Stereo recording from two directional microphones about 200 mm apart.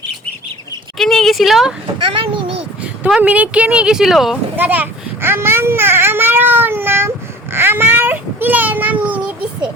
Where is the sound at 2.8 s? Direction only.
5° right (ahead or behind).